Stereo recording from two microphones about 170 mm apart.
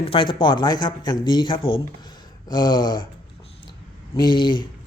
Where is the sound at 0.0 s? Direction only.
30° left (ahead or behind).